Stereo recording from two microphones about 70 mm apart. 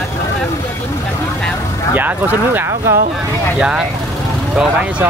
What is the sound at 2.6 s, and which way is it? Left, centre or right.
Speech, right.